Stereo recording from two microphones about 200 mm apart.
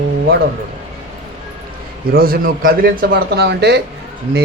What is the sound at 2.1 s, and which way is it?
A man's voice, 45° right (ahead or behind).